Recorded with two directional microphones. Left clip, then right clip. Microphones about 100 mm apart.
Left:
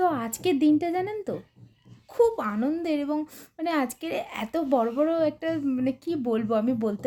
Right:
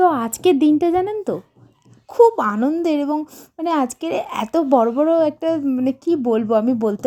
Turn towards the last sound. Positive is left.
turn(degrees=-50)  # may be behind; listen again after turning